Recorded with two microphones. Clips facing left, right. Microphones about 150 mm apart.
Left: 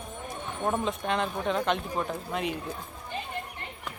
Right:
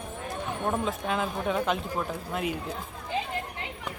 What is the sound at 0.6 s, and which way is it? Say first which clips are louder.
Speech: left 1 dB; centre (ahead or behind).